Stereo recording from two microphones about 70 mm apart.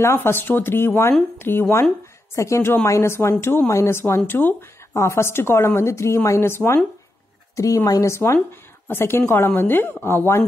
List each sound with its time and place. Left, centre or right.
0.0 s speech: left
2.3 s a woman's voice: left
7.5 s a woman's voice: left
8.8 s speech: left